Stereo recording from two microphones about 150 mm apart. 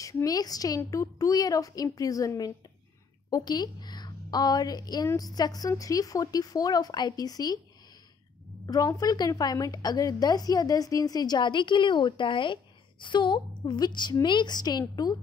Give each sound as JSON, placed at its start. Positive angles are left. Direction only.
{"t": 0.0, "sound": "a woman's voice", "side_deg": 20}
{"t": 8.6, "sound": "a woman's voice", "side_deg": 25}